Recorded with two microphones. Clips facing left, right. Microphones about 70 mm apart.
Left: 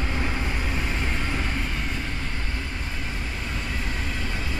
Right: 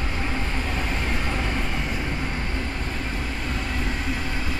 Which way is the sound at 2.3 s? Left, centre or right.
Right.